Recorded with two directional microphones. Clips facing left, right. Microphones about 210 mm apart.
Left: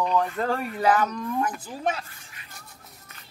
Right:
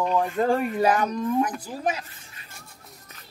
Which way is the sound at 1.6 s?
10° right (ahead or behind).